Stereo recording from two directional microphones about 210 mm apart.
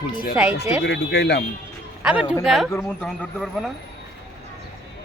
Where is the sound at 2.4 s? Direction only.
Centre (ahead or behind).